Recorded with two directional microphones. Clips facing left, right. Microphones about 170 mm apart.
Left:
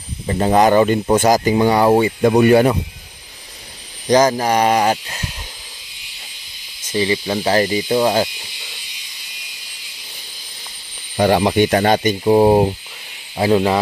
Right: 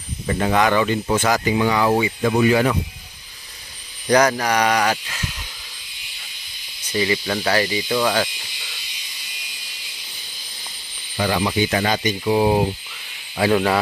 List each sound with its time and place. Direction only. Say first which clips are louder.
0.3 s speech: left 5 dB; 30° left (ahead or behind)
4.1 s speech: left 3 dB; 25° left (ahead or behind)
6.9 s speech: left 3 dB; 25° left (ahead or behind)
7.4 s speech: left 5 dB; 35° left (ahead or behind)
11.1 s speech: left 7 dB; 50° left (ahead or behind)
13.4 s speech: left 3 dB; 20° left (ahead or behind)